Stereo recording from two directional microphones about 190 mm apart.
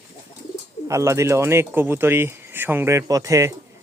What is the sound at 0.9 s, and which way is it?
Speech, 15° right (ahead or behind).